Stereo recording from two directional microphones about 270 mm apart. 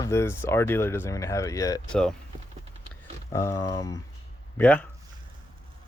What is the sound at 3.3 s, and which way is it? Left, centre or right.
Speech, centre.